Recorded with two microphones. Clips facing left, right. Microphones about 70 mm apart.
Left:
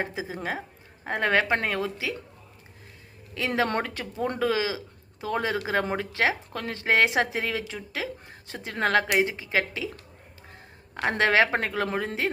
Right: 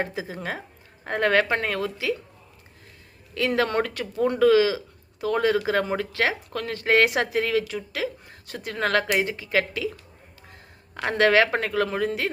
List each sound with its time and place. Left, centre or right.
0.0 s speech: centre
3.3 s a woman's voice: centre
10.9 s speech: left